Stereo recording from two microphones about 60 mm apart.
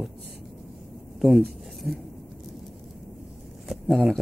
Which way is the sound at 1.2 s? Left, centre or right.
Centre.